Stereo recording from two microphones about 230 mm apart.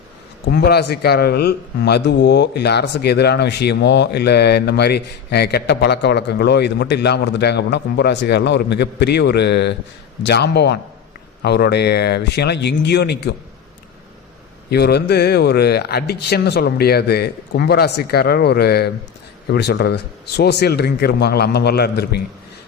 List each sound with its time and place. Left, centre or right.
0.4 s a man's voice: left
14.7 s a man's voice: left